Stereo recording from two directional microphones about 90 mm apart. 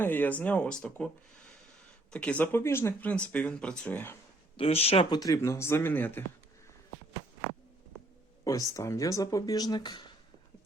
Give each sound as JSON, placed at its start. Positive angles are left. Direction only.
{"t": 0.0, "sound": "speech", "side_deg": 20}
{"t": 3.0, "sound": "speech", "side_deg": 15}
{"t": 4.5, "sound": "speech", "side_deg": 90}
{"t": 5.0, "sound": "speech", "side_deg": 45}
{"t": 5.4, "sound": "speech", "side_deg": 30}
{"t": 8.4, "sound": "speech", "side_deg": 40}